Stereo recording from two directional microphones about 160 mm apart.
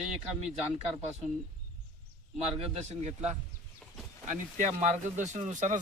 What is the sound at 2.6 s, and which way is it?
Speech, 40° right (ahead or behind).